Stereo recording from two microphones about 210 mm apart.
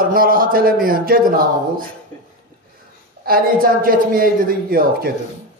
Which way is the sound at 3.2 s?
45° right (ahead or behind).